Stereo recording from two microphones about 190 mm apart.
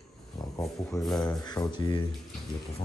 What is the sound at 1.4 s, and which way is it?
Speech, 25° left (ahead or behind).